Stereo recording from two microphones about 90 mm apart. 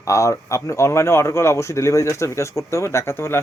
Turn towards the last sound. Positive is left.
turn(degrees=30)  # may be behind; listen again after turning